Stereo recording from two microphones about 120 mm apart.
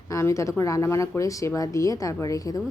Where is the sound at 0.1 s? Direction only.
25° left (ahead or behind).